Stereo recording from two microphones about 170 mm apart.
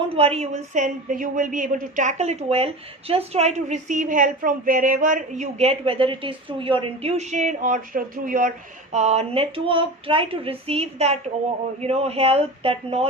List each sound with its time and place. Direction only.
0.1 s speech: 35° right (ahead or behind)